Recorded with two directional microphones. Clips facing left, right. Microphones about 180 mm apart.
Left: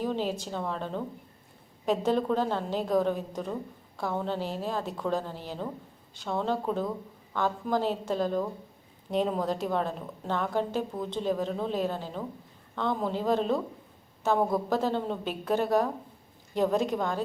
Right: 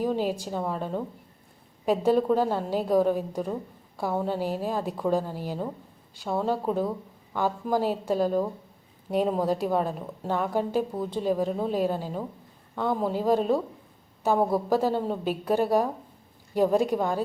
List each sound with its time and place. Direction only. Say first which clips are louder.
0.0 s a woman's voice: right 3 dB; 10° right (ahead or behind)